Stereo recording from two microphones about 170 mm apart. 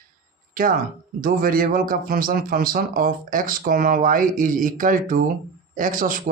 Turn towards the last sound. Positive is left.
turn(degrees=-55)  # may be behind; listen again after turning